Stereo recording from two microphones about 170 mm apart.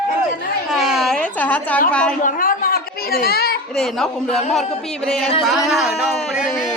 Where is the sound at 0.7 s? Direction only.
5° right (ahead or behind).